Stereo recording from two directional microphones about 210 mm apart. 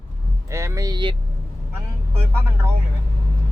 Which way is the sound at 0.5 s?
15° right (ahead or behind).